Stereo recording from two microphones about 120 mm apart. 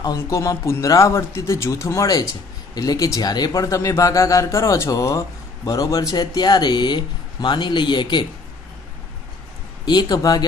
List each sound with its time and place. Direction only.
0.2 s speech: 25° left (ahead or behind); by 8.2 s 40° left (ahead or behind)
9.8 s speech: 35° left (ahead or behind)